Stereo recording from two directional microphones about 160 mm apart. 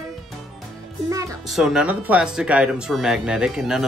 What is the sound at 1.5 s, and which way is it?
Speech, 5° right (ahead or behind).